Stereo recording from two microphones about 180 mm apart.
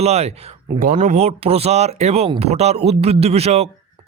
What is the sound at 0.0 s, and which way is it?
Speech, 35° right (ahead or behind).